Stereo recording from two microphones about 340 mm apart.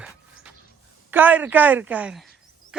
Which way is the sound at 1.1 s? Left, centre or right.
Centre.